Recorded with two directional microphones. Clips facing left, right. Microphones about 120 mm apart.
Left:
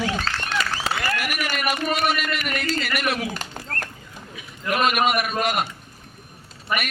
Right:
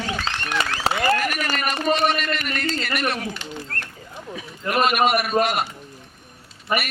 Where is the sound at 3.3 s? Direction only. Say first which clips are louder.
Even; 40° left (ahead or behind).